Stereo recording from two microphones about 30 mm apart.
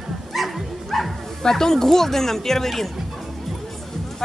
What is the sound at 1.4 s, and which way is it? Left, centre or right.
Speech, centre.